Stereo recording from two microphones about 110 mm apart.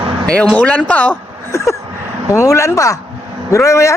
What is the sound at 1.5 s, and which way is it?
A man's voice, 25° left (ahead or behind).